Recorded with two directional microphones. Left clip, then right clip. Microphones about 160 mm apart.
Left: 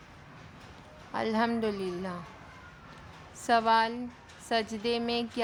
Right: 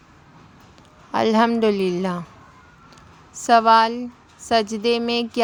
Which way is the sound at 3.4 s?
40° right (ahead or behind).